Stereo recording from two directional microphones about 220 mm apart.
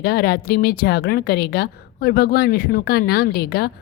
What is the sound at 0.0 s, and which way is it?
A woman's voice, 45° left (ahead or behind).